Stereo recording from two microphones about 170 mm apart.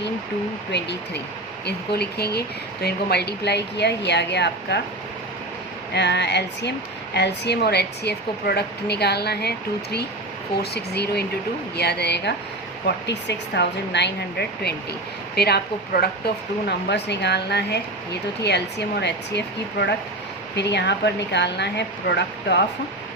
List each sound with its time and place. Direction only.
0.7 s a woman's voice: 85° left
1.6 s a woman's voice: 70° left (ahead or behind); by 4.8 s 90° left
5.9 s speech: 90° left
12.8 s speech: 90° left